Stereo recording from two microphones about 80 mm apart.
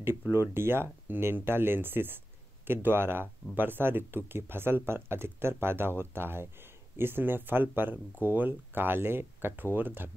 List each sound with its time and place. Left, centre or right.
0.3 s speech: right